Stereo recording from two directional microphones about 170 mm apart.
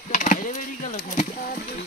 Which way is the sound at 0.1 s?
50° left (ahead or behind).